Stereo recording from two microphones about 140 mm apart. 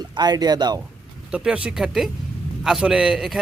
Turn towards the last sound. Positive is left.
turn(degrees=0)  # may be behind; listen again after turning